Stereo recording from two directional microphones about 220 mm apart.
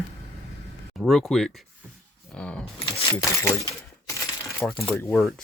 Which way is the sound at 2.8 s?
25° left (ahead or behind).